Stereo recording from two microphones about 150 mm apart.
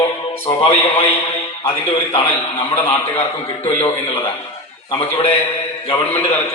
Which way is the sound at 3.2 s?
40° left (ahead or behind).